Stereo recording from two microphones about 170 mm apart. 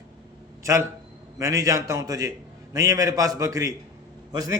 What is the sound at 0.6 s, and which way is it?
A man's voice, 15° right (ahead or behind).